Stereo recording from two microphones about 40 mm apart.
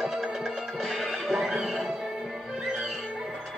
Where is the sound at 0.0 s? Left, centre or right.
Centre.